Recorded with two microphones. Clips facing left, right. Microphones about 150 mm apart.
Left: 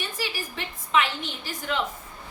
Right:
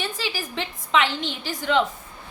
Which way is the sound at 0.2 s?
90° right.